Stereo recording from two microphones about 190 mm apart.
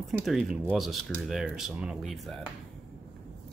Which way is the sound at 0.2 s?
Centre (ahead or behind).